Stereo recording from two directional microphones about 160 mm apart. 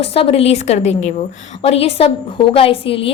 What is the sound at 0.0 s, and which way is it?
A woman's voice, 40° left (ahead or behind).